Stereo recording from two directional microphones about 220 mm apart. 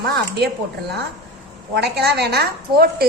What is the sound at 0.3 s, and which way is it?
A woman's voice, 45° right (ahead or behind).